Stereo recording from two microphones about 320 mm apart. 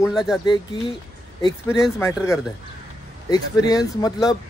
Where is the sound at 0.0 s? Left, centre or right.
Centre.